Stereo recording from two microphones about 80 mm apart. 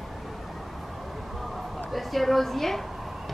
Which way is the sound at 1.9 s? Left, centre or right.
Centre.